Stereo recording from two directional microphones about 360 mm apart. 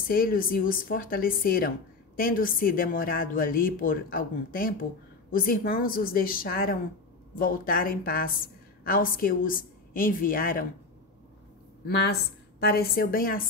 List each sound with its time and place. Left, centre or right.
0.1 s speech: left
12.6 s speech: left